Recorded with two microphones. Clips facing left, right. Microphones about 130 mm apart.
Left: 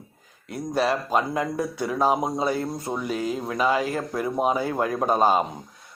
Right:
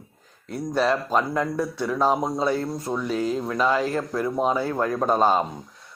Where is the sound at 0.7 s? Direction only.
10° left (ahead or behind).